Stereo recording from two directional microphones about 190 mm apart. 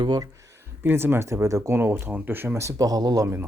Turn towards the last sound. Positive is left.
turn(degrees=-15)  # may be behind; listen again after turning